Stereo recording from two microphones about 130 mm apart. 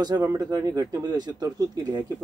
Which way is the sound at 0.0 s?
30° right (ahead or behind).